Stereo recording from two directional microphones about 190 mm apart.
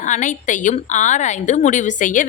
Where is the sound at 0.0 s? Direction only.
40° left (ahead or behind).